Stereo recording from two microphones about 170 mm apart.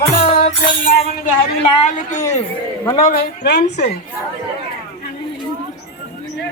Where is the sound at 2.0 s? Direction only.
50° left (ahead or behind); by 3.8 s 75° left (ahead or behind).